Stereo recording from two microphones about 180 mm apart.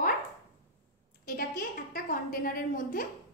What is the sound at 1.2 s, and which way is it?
A woman's voice, 55° left (ahead or behind).